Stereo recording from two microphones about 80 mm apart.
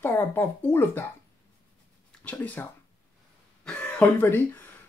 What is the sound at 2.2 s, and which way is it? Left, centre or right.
Speech, left.